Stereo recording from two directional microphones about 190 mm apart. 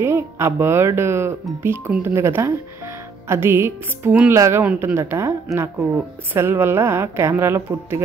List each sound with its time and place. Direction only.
0.0 s a woman's voice: 15° right (ahead or behind)